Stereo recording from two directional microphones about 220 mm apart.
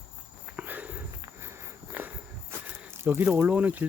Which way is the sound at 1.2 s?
10° right (ahead or behind).